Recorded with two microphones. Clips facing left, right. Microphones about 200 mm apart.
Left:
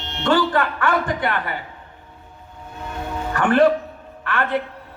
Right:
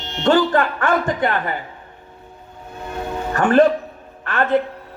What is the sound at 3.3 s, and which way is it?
Music, 40° right (ahead or behind).